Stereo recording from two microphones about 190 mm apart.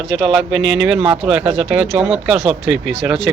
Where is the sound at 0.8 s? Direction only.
5° right (ahead or behind).